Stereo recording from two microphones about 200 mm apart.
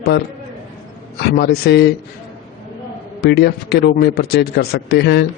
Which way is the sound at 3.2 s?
55° left (ahead or behind).